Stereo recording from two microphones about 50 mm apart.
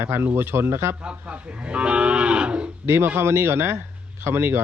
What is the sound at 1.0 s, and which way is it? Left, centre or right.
Livestock, right.